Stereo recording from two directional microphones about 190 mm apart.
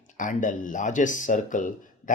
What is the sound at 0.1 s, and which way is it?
Speech, 40° left (ahead or behind).